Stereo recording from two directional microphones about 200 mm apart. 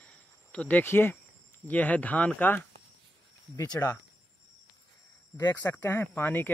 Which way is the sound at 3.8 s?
10° left (ahead or behind).